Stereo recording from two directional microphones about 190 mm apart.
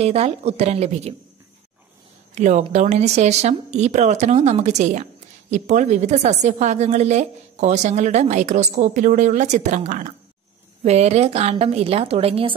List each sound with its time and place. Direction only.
0.0 s a woman's voice: 35° right (ahead or behind)
2.3 s a woman's voice: 40° right (ahead or behind)